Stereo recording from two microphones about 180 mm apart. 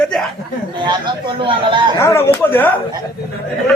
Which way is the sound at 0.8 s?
25° right (ahead or behind).